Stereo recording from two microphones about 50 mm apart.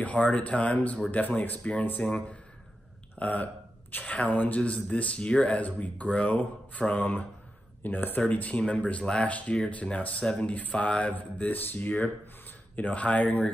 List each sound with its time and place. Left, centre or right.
0.0 s speech: left
3.2 s speech: left